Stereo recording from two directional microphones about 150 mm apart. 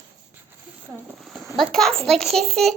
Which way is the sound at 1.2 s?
Centre (ahead or behind).